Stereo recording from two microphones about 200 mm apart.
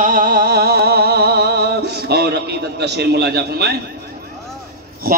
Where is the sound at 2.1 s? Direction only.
55° right (ahead or behind).